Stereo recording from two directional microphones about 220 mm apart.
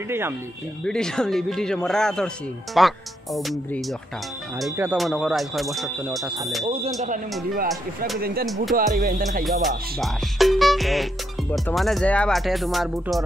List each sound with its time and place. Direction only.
0.8 s speech: 5° left (ahead or behind)
6.6 s speech: 25° right (ahead or behind)
7.0 s speech: 40° right (ahead or behind)
9.4 s speech: centre (ahead or behind)